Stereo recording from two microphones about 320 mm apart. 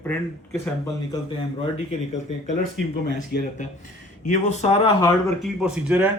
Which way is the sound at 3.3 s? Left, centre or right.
Left.